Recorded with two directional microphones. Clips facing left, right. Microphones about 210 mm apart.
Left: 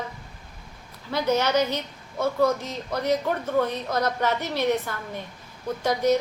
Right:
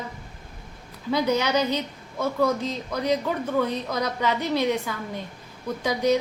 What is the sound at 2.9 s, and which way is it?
A woman's voice, 10° right (ahead or behind).